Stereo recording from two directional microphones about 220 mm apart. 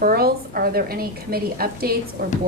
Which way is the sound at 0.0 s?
45° right (ahead or behind).